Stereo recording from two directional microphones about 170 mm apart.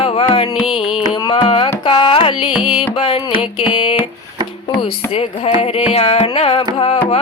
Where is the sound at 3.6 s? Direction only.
30° left (ahead or behind).